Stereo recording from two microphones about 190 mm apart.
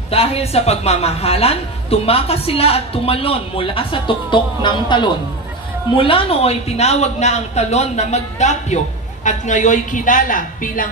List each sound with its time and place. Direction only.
0.1 s a man's voice: 30° left (ahead or behind)